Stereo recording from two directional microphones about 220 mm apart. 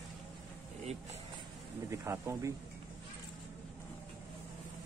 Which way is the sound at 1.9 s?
15° right (ahead or behind).